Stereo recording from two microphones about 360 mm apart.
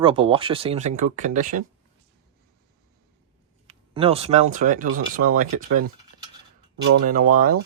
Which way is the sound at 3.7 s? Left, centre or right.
Centre.